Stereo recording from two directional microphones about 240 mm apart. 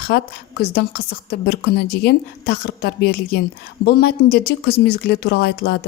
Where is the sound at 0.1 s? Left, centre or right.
Left.